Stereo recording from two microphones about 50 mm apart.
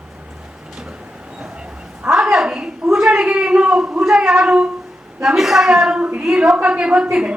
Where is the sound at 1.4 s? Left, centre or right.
Centre.